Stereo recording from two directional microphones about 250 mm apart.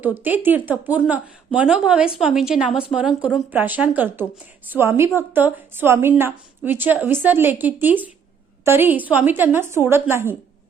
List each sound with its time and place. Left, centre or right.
0.0 s a woman's voice: centre